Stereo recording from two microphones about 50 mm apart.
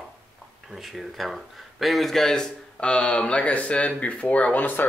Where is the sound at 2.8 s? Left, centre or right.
Left.